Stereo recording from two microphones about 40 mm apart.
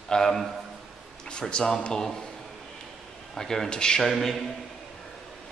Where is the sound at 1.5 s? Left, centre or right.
Centre.